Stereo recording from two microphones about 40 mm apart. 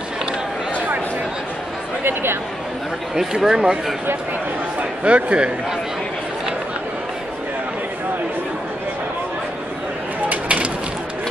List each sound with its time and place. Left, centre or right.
3.2 s speech: centre
4.7 s speech: right
10.3 s a sound: right